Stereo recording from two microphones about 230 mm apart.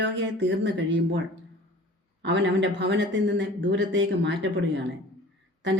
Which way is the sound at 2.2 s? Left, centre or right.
Right.